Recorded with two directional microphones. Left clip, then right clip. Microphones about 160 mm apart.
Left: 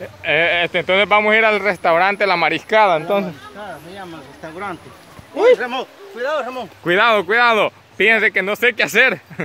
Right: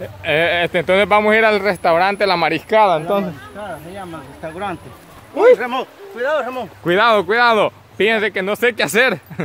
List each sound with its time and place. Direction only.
0.0 s speech: 5° right (ahead or behind)
4.4 s speech: 25° right (ahead or behind)
5.6 s speech: 15° right (ahead or behind)